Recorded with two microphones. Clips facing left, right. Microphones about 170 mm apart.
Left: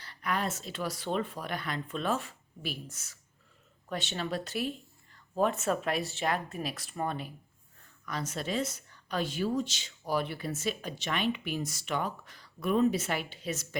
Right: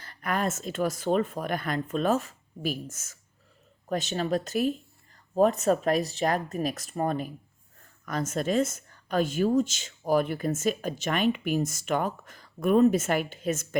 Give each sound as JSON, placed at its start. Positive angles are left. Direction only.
{"t": 0.0, "sound": "a woman's voice", "side_deg": -50}